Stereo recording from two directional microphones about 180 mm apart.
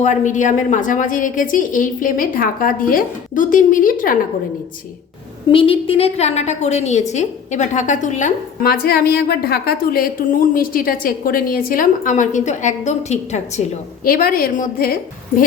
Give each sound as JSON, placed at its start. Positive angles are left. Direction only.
{"t": 0.0, "sound": "a woman's voice", "side_deg": 45}
{"t": 5.5, "sound": "a woman's voice", "side_deg": 30}
{"t": 14.0, "sound": "a woman's voice", "side_deg": 55}